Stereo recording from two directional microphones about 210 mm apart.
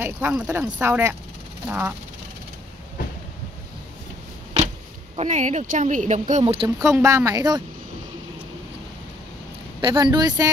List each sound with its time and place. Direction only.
0.0 s speech: 10° right (ahead or behind)
5.1 s speech: 30° right (ahead or behind)
6.8 s speech: 15° right (ahead or behind)
9.8 s speech: 20° right (ahead or behind)